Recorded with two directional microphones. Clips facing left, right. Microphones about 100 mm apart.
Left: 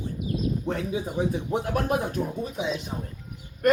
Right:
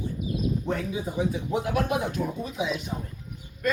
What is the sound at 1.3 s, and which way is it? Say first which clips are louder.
Speech: left 1 dB; 45° left (ahead or behind).